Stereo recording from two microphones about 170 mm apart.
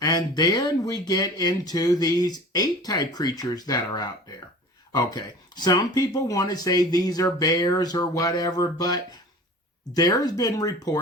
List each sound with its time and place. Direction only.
0.0 s speech: 25° left (ahead or behind)